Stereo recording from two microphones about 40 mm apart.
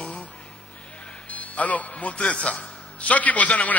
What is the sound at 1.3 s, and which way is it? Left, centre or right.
A man's voice, left.